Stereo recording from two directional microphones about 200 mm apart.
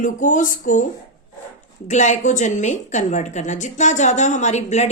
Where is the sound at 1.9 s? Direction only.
35° left (ahead or behind).